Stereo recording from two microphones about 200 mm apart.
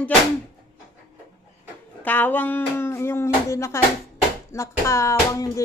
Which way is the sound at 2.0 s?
10° left (ahead or behind).